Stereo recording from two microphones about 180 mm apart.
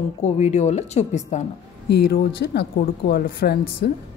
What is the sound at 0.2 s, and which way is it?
Speech, 40° left (ahead or behind).